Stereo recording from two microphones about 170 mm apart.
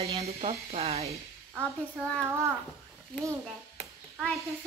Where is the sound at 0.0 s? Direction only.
35° right (ahead or behind).